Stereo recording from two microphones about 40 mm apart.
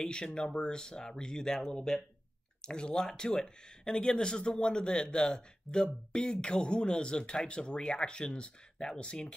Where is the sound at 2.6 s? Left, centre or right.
Left.